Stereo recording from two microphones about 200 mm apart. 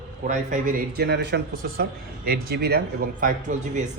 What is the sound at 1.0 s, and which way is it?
Speech, 55° right (ahead or behind).